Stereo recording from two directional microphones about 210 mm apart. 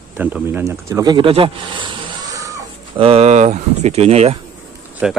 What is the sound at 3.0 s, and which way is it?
Speech, 30° right (ahead or behind).